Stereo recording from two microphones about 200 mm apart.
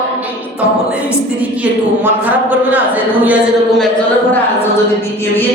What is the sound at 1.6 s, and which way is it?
A woman's voice, 10° right (ahead or behind).